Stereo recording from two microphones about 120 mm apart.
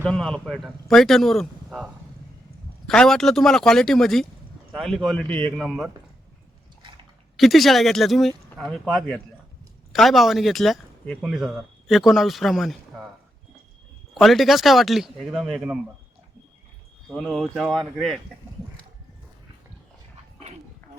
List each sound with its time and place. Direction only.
0.0 s a man's voice: 5° left (ahead or behind)
5.5 s speech: centre (ahead or behind)
7.3 s speech: centre (ahead or behind)
14.1 s speech: centre (ahead or behind)
17.1 s speech: 5° left (ahead or behind)